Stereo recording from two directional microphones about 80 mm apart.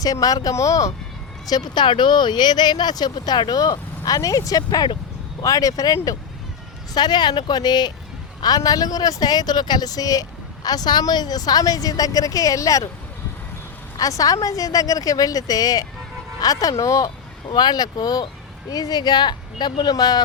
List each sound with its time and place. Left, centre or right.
0.0 s speech: left
1.5 s speech: left
6.9 s speech: left
14.0 s speech: left
17.5 s speech: left